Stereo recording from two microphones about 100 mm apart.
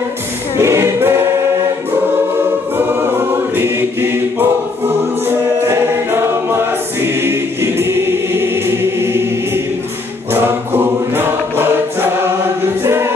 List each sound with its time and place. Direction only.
0.6 s choir: 30° right (ahead or behind)
2.8 s choir: 20° right (ahead or behind)
7.0 s choir: 25° right (ahead or behind)
12.8 s music: 25° right (ahead or behind)